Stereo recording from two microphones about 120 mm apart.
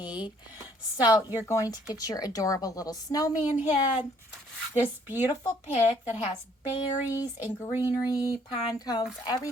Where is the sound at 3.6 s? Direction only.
15° right (ahead or behind).